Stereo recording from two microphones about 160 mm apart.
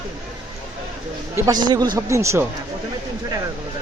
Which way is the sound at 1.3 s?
25° right (ahead or behind).